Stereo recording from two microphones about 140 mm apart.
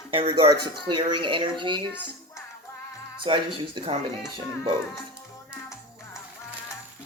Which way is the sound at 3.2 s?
35° right (ahead or behind).